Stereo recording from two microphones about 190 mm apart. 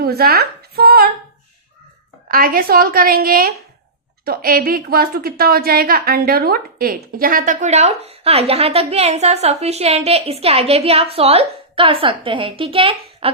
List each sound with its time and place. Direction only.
0.0 s speech: 55° right (ahead or behind)
2.3 s a woman's voice: 50° right (ahead or behind); by 13.3 s 30° right (ahead or behind)